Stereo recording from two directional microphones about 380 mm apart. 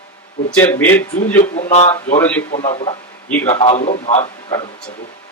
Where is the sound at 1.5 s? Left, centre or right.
Centre.